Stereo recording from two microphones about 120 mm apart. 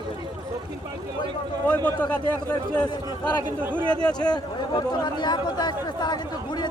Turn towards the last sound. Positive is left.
turn(degrees=35)  # may be behind; listen again after turning